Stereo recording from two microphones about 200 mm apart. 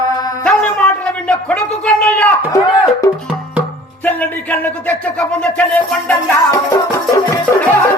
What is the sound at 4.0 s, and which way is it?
Music, 10° left (ahead or behind).